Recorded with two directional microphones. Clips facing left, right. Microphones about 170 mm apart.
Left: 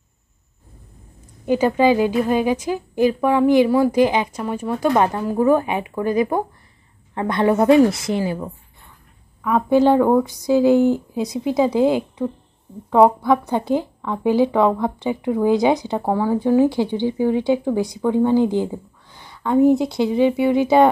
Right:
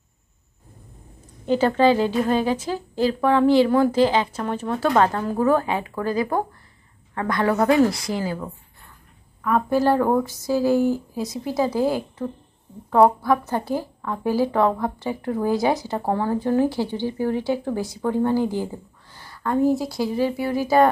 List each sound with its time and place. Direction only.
1.4 s a woman's voice: 10° left (ahead or behind)
9.7 s a woman's voice: 20° left (ahead or behind)
9.9 s speech: 5° left (ahead or behind)
10.2 s a woman's voice: 15° left (ahead or behind)
13.3 s a woman's voice: 15° left (ahead or behind)
19.3 s a sound: centre (ahead or behind)
19.6 s a woman's voice: 20° left (ahead or behind)